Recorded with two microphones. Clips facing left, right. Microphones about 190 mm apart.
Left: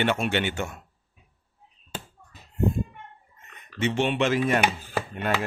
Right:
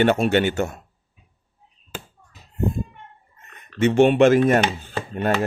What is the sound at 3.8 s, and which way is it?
Speech, 50° right (ahead or behind).